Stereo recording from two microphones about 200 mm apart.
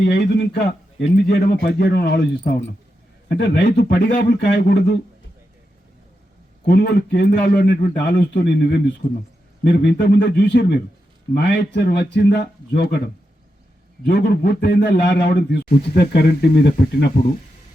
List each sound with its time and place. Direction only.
0.0 s a man's voice: 55° left (ahead or behind)
6.7 s a man's voice: 55° left (ahead or behind)
14.0 s a man's voice: 60° left (ahead or behind)